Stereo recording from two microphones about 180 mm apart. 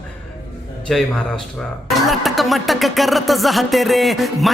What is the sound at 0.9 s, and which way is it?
Music, 5° left (ahead or behind).